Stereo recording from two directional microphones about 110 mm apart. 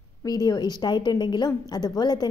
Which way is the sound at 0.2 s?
35° left (ahead or behind).